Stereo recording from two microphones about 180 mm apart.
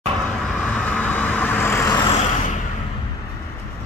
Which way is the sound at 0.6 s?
5° left (ahead or behind).